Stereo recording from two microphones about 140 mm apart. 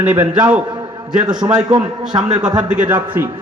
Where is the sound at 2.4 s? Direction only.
5° right (ahead or behind).